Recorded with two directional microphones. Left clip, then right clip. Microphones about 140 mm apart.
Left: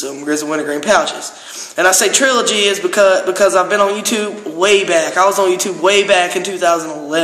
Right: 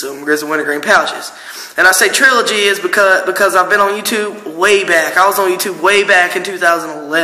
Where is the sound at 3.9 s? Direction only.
50° left (ahead or behind).